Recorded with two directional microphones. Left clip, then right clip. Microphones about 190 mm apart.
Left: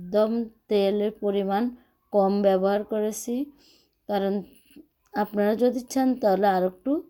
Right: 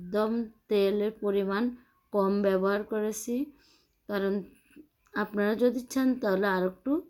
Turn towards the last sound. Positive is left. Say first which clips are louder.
# left 4 dB
turn(degrees=20)  # may be behind; listen again after turning